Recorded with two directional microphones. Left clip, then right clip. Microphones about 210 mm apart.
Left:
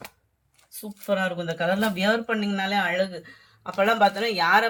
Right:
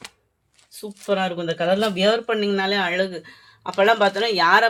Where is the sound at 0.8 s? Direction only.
45° right (ahead or behind).